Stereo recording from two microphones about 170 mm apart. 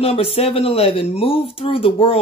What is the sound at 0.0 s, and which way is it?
Speech, 35° left (ahead or behind).